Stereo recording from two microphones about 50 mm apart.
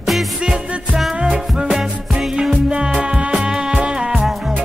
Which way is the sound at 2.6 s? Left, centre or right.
Centre.